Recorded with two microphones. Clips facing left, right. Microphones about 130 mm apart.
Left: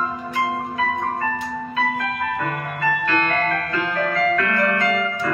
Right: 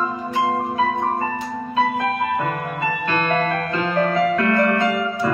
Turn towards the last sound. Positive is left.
turn(degrees=-25)  # may be behind; listen again after turning